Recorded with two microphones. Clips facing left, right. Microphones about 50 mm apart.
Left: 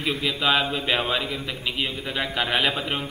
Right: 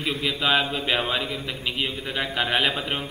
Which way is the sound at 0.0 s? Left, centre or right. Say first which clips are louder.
Left 1 dB; centre.